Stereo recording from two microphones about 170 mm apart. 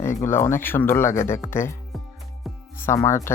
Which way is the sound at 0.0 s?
15° left (ahead or behind).